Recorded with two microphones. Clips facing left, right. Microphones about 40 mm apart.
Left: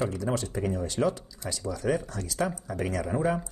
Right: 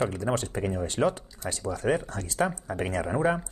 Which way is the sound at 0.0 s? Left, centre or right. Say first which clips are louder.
Right 2 dB; right.